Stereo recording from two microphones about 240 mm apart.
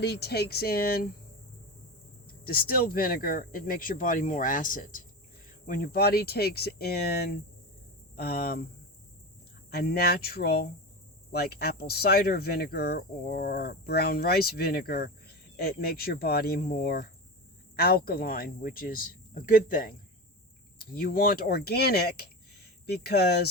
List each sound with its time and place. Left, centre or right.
0.0 s speech: left
2.2 s speech: left
9.7 s speech: left